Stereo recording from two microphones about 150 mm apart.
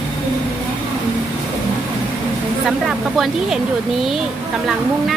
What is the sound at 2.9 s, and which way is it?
Speech, centre (ahead or behind).